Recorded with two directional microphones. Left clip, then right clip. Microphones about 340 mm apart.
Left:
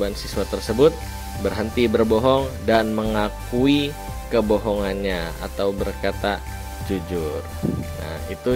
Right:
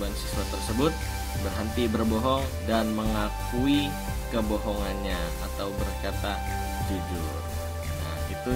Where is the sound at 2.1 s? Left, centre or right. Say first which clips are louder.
Left 9 dB; left.